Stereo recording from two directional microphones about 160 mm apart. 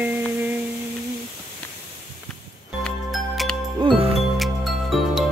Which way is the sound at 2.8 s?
Centre (ahead or behind).